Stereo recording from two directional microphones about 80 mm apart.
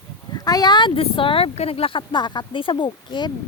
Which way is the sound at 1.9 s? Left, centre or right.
Left.